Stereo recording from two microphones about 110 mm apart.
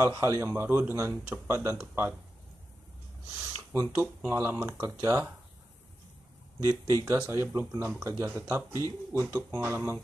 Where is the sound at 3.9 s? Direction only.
20° right (ahead or behind).